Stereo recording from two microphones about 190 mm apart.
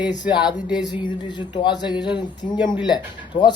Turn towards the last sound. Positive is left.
turn(degrees=25)  # may be behind; listen again after turning